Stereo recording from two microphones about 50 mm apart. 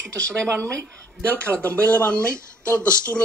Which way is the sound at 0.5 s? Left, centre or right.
Right.